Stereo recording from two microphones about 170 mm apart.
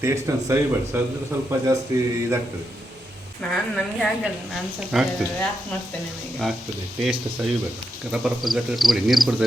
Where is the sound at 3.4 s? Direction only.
5° left (ahead or behind).